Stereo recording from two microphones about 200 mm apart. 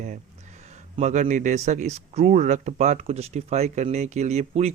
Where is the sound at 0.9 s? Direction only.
35° right (ahead or behind).